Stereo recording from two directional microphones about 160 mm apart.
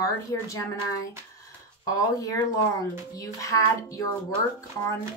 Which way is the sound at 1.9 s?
20° left (ahead or behind).